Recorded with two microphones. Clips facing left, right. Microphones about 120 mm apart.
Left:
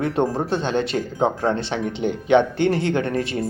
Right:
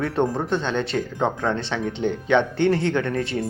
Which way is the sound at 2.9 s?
40° left (ahead or behind).